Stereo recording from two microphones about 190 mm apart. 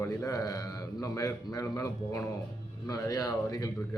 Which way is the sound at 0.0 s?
15° left (ahead or behind).